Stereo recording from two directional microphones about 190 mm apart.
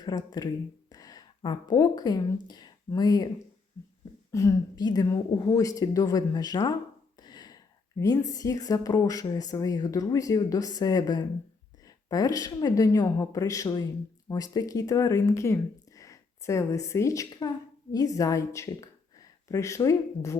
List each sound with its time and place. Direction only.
0.0 s a woman's voice: 20° left (ahead or behind)